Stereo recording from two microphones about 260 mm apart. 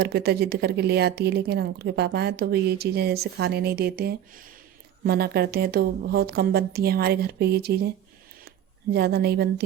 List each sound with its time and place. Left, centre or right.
0.0 s a woman's voice: right